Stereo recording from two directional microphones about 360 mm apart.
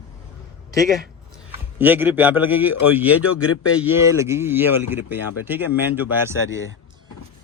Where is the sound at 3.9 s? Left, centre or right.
Centre.